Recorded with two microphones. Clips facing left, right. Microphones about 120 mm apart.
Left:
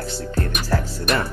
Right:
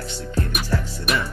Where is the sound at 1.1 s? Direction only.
Centre (ahead or behind).